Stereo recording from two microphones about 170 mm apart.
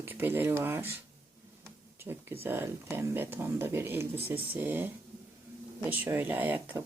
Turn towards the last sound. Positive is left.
turn(degrees=-10)  # may be behind; listen again after turning